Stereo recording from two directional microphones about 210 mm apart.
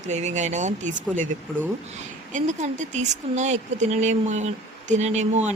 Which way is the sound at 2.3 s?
35° right (ahead or behind).